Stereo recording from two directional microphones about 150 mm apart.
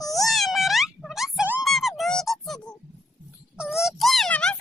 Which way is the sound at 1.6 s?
Centre (ahead or behind).